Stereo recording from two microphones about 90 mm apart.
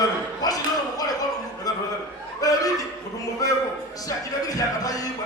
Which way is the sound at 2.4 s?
40° left (ahead or behind).